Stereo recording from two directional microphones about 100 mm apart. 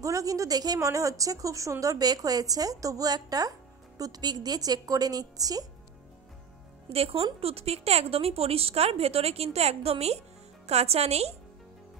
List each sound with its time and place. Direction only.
0.0 s speech: 35° right (ahead or behind)
6.9 s speech: 70° right (ahead or behind); by 11.3 s 90° right